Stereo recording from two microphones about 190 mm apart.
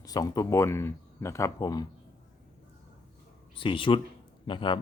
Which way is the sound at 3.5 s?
25° left (ahead or behind).